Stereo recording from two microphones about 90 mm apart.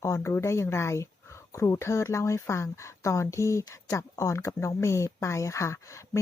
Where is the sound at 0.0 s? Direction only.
35° left (ahead or behind).